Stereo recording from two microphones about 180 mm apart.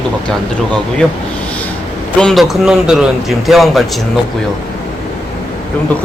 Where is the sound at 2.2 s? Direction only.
Centre (ahead or behind).